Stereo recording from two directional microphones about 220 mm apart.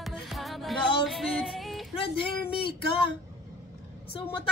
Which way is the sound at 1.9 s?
25° left (ahead or behind).